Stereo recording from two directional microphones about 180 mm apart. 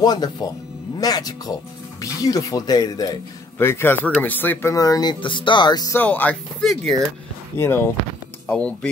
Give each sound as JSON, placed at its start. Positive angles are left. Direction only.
{"t": 0.0, "sound": "speech", "side_deg": 20}
{"t": 5.9, "sound": "speech", "side_deg": 10}
{"t": 7.5, "sound": "speech", "side_deg": 15}